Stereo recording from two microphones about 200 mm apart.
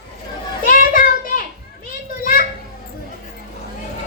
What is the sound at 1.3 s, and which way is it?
Children playing, 40° left (ahead or behind).